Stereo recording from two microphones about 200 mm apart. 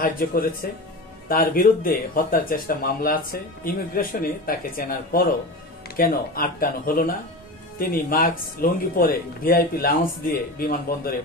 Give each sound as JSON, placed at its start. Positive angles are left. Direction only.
{"t": 0.0, "sound": "speech", "side_deg": 45}